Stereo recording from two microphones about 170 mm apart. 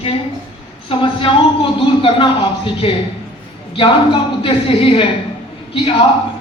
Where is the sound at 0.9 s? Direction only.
30° left (ahead or behind).